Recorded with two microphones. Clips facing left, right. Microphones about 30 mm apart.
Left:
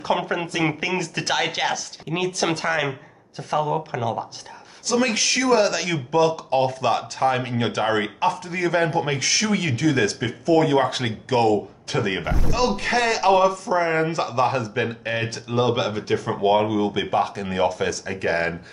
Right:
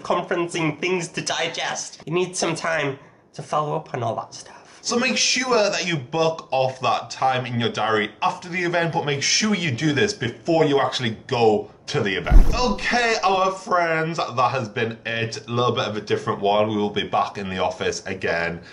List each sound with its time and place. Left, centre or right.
0.2 s speech: centre
4.8 s speech: centre